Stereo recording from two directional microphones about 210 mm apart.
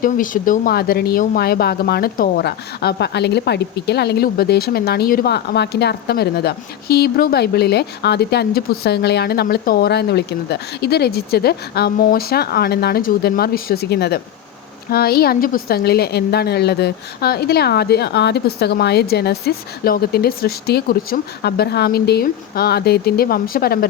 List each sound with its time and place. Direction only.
0.0 s speech: 40° left (ahead or behind)